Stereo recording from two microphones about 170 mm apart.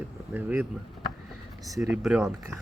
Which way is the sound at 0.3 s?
10° right (ahead or behind).